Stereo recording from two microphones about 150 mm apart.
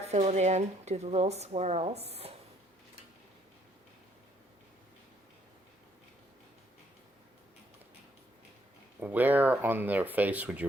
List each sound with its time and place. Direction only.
0.1 s speech: 45° right (ahead or behind)
9.0 s speech: 10° right (ahead or behind)